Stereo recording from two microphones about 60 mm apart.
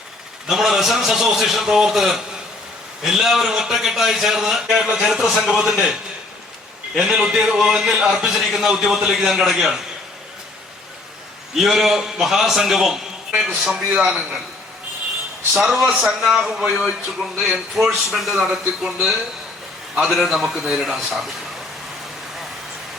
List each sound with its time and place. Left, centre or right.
0.4 s a man's voice: centre
6.9 s a man's voice: centre
11.5 s a man's voice: centre
14.0 s a man's voice: centre
15.5 s a man's voice: centre
17.7 s a man's voice: centre
20.0 s a man's voice: centre